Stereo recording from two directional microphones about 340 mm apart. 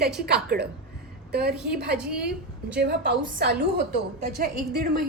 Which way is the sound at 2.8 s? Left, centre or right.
Right.